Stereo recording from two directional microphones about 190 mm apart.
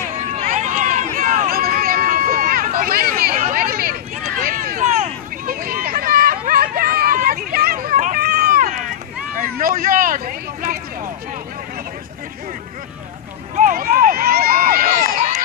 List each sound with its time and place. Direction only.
0.4 s run: 40° right (ahead or behind)
3.5 s a sound: 50° right (ahead or behind)
5.5 s hubbub: 50° right (ahead or behind)
13.6 s run: 45° right (ahead or behind)